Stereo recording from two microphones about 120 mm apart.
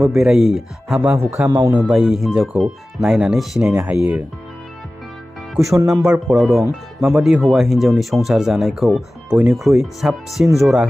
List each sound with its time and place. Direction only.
0.1 s speech: 5° right (ahead or behind)
1.1 s a man's voice: 25° right (ahead or behind)
1.6 s speech: 35° right (ahead or behind)
1.9 s speech: 5° right (ahead or behind)
5.9 s speech: 10° right (ahead or behind)